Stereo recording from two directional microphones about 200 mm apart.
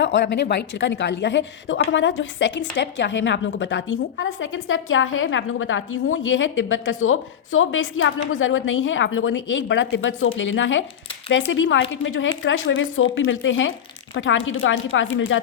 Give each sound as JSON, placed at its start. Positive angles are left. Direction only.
{"t": 0.0, "sound": "a woman's voice", "side_deg": 60}